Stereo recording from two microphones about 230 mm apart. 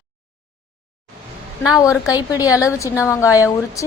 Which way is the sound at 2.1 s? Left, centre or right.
Centre.